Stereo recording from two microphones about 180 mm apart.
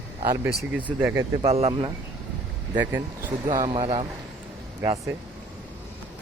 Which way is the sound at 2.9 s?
15° right (ahead or behind).